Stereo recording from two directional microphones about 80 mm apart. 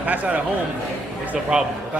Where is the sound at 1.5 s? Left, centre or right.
Centre.